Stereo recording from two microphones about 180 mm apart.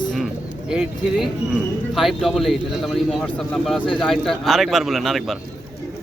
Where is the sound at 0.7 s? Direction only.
Centre (ahead or behind).